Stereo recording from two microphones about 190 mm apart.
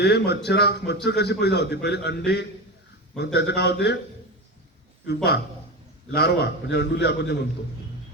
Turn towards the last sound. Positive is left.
turn(degrees=60)  # may be behind; listen again after turning